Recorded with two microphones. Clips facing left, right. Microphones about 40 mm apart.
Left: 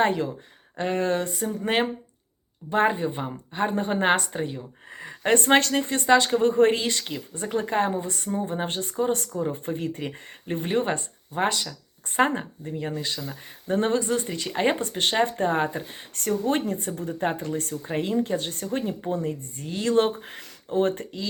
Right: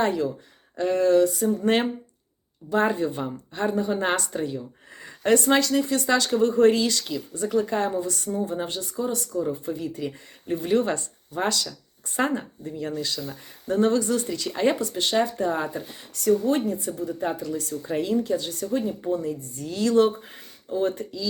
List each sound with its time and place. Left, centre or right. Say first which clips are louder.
0.0 s speech: left 1 dB; left
1.5 s speech: right 3 dB; centre
2.6 s speech: even; left
3.7 s speech: right 1 dB; left
4.1 s speech: left 2 dB; left
5.4 s speech: left 1 dB; left
20.2 s speech: left 2 dB; left